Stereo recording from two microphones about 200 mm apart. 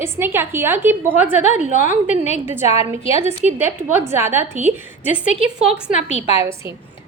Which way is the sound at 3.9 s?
10° right (ahead or behind).